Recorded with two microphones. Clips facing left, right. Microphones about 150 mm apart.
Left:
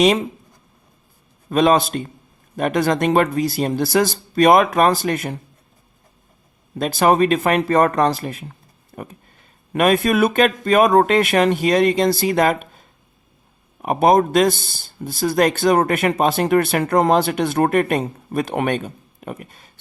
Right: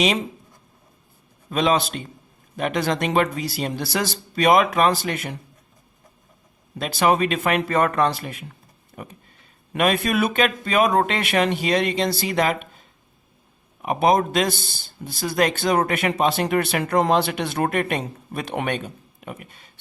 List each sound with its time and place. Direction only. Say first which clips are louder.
1.5 s speech: left 5 dB; 45° left (ahead or behind)
6.7 s speech: left 4 dB; 40° left (ahead or behind)
13.8 s speech: left 4 dB; 45° left (ahead or behind)